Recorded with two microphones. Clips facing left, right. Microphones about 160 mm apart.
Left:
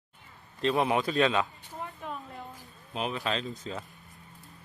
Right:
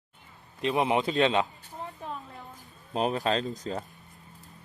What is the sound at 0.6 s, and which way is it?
Speech, 15° right (ahead or behind).